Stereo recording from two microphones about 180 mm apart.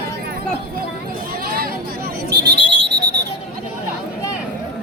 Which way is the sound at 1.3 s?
55° right (ahead or behind).